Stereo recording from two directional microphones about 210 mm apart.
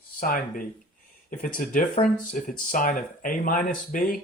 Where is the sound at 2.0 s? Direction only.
40° left (ahead or behind).